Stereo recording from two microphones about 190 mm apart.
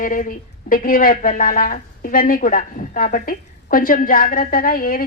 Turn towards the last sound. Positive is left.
turn(degrees=50)  # may be behind; listen again after turning